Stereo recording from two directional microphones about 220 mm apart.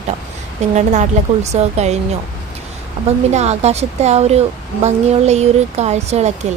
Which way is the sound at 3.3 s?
30° right (ahead or behind).